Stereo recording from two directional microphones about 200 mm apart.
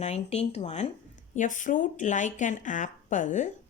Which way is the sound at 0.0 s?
35° left (ahead or behind).